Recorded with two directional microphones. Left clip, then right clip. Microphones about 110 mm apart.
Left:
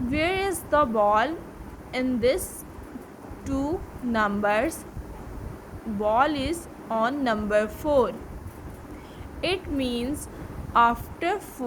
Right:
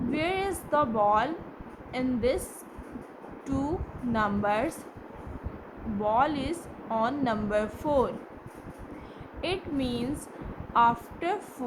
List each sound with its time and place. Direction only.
0.1 s a woman's voice: 45° left (ahead or behind)
3.4 s a woman's voice: 45° left (ahead or behind)
6.0 s a woman's voice: 45° left (ahead or behind)
9.4 s a woman's voice: 50° left (ahead or behind)